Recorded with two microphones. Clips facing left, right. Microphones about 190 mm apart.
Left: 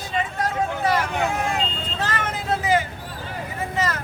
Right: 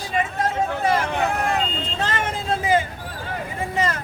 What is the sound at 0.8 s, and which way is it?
Vehicle, 25° right (ahead or behind).